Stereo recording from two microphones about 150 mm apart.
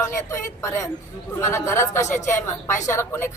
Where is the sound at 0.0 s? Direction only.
20° left (ahead or behind).